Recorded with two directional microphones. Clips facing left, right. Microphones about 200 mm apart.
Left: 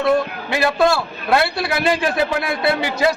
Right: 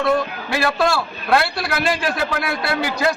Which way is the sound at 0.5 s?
20° left (ahead or behind).